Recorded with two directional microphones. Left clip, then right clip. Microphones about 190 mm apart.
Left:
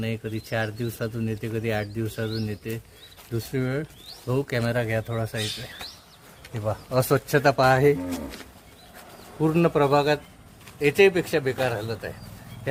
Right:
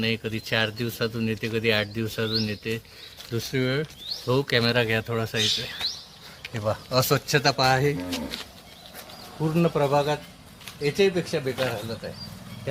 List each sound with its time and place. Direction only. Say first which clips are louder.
0.0 s speech: right 4 dB; 5° left (ahead or behind)
6.9 s speech: left 1 dB; 35° left (ahead or behind)
7.3 s speech: left 5 dB; 55° left (ahead or behind)
9.6 s speech: left 1 dB; 50° left (ahead or behind)
10.8 s speech: left 4 dB; 40° left (ahead or behind)